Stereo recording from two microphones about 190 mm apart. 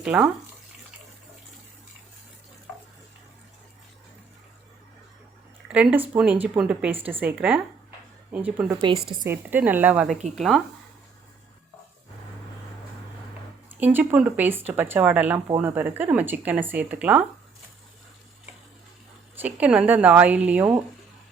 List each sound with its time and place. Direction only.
0.0 s speech: 5° right (ahead or behind)
5.6 s speech: 5° right (ahead or behind)
8.7 s a woman's voice: 25° right (ahead or behind)
9.2 s speech: 10° right (ahead or behind)
13.7 s speech: 10° right (ahead or behind)
19.4 s speech: 10° right (ahead or behind)